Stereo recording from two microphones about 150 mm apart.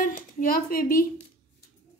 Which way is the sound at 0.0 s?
70° left (ahead or behind).